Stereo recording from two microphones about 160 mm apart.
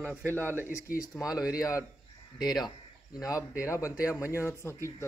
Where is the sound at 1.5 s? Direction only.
20° left (ahead or behind).